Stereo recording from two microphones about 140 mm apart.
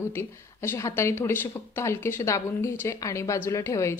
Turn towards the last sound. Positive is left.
turn(degrees=20)  # may be behind; listen again after turning